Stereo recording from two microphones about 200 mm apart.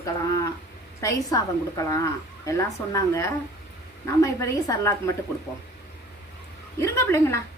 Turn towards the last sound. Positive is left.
turn(degrees=15)  # may be behind; listen again after turning